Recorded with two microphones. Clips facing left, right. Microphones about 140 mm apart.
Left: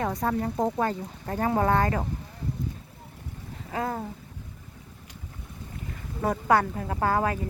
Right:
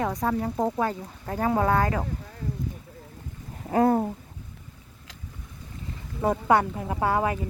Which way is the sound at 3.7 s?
35° right (ahead or behind).